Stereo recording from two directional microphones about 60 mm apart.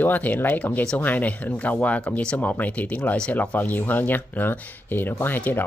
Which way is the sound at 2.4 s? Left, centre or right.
Left.